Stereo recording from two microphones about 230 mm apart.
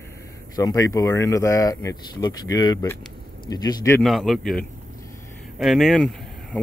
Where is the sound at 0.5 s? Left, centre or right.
Centre.